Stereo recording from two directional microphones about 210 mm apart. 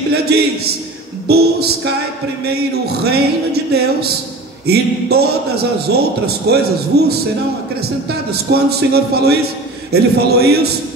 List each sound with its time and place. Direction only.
1.2 s a man's voice: 50° right (ahead or behind)
3.1 s a man's voice: 50° right (ahead or behind)
8.3 s a man's voice: 50° right (ahead or behind)